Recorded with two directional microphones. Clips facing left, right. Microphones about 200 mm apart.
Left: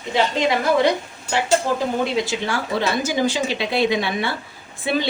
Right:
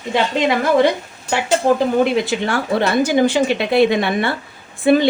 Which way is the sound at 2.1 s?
55° right (ahead or behind).